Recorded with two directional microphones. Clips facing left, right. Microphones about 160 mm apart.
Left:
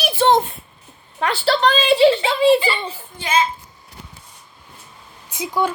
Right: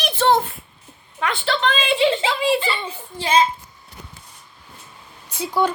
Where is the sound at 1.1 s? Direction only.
35° left (ahead or behind).